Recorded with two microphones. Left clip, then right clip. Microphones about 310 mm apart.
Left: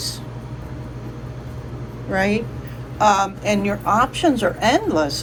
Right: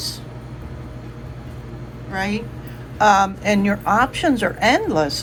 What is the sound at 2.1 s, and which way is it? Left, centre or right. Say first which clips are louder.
A man's voice: left 4 dB; centre.